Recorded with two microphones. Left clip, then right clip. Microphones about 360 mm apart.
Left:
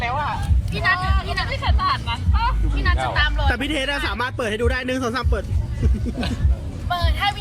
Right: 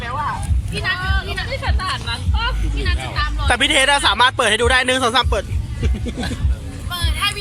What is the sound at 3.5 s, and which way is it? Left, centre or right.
Speech, centre.